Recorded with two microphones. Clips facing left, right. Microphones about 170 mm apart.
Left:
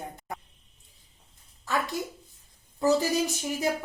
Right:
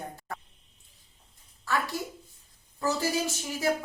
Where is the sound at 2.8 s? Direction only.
15° left (ahead or behind).